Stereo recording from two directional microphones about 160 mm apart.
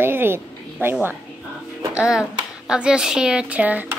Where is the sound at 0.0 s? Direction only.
15° right (ahead or behind).